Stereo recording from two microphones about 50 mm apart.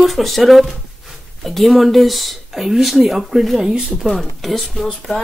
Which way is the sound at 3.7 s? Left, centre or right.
Centre.